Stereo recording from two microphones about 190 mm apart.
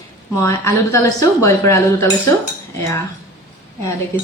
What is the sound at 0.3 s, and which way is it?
Speech, 15° left (ahead or behind).